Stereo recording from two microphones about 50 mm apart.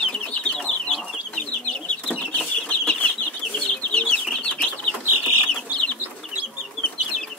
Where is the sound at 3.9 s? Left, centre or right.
Left.